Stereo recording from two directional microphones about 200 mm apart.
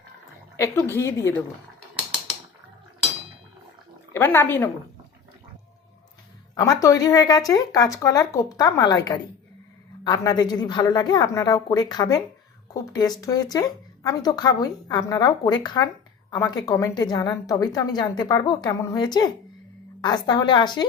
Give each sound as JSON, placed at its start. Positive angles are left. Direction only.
{"t": 0.5, "sound": "a woman's voice", "side_deg": 15}
{"t": 4.1, "sound": "a woman's voice", "side_deg": 10}
{"t": 6.6, "sound": "a woman's voice", "side_deg": 15}